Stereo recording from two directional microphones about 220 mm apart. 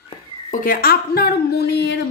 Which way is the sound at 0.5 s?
40° left (ahead or behind).